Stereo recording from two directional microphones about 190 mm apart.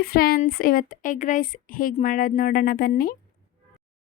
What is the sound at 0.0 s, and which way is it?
A woman's voice, 50° left (ahead or behind).